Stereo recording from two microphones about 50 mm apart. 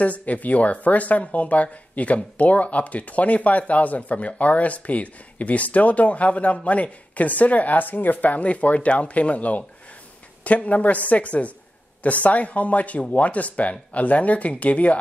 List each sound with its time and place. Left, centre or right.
0.0 s speech: left